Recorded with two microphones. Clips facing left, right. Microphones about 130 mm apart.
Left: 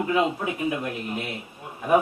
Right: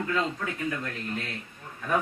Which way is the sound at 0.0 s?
15° left (ahead or behind).